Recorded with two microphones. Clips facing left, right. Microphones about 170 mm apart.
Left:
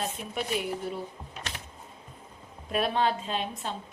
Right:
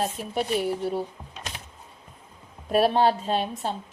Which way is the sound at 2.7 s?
35° right (ahead or behind).